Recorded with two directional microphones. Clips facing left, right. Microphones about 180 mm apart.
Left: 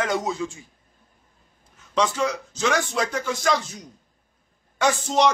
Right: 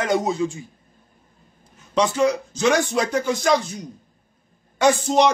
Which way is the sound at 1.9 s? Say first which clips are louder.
Right 4 dB; 15° right (ahead or behind).